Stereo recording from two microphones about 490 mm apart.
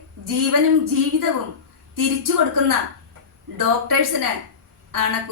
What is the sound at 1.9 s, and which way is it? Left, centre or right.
A woman's voice, right.